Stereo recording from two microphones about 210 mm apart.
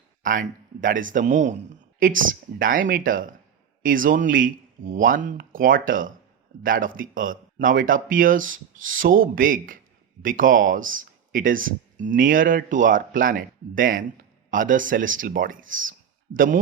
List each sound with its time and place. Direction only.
0.2 s speech: 40° right (ahead or behind)
15.7 s speech: 70° right (ahead or behind)
16.3 s speech: 40° right (ahead or behind)